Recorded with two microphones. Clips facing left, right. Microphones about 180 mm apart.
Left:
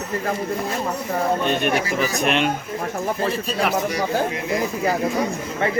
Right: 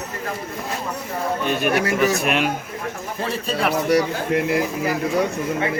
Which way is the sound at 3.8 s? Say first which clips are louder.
Right 3 dB; 70° right (ahead or behind).